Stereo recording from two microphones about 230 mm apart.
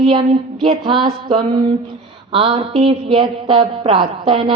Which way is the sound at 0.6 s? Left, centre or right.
Right.